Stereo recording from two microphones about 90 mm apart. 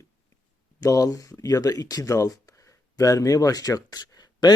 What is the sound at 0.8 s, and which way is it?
Speech, 40° left (ahead or behind).